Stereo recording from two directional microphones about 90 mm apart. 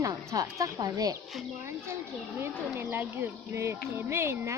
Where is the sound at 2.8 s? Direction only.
25° right (ahead or behind).